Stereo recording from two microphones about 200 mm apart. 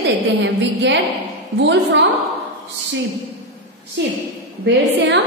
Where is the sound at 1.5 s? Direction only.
60° right (ahead or behind).